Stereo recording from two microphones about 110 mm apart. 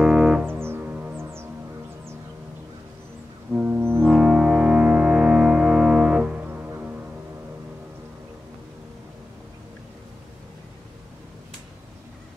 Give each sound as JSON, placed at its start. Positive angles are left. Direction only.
{"t": 0.0, "sound": "music", "side_deg": -5}
{"t": 0.5, "sound": "music", "side_deg": -20}
{"t": 3.5, "sound": "music", "side_deg": -10}